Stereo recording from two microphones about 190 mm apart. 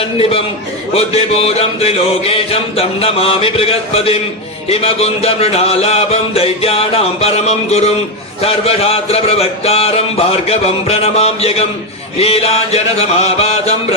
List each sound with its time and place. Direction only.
0.0 s music: 30° left (ahead or behind)